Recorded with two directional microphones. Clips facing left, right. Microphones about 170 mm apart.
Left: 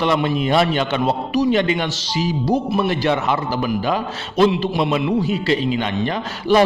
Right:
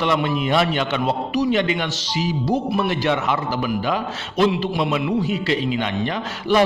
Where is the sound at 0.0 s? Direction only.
35° left (ahead or behind).